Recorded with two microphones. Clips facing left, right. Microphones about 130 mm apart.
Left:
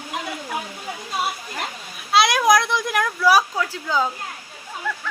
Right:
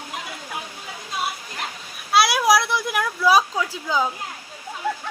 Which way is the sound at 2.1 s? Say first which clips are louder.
Left 1 dB; 5° right (ahead or behind).